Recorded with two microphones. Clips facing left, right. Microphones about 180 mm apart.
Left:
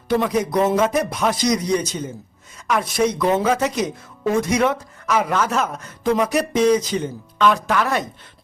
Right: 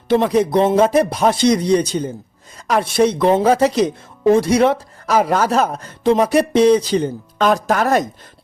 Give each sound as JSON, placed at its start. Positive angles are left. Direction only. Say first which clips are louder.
{"t": 0.1, "sound": "speech", "louder": "right 5 dB", "side_deg": -30}